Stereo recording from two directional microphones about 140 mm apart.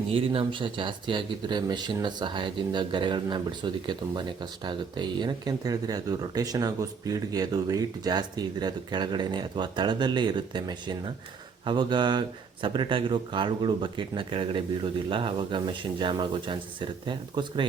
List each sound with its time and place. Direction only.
0.1 s speech: 40° right (ahead or behind)